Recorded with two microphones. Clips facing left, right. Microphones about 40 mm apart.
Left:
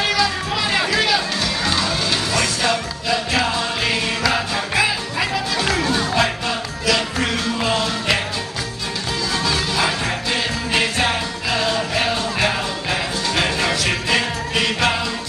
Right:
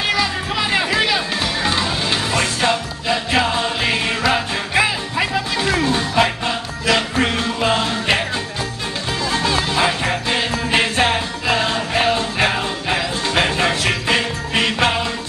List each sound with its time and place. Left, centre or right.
0.1 s music: right
9.3 s jingle bell: right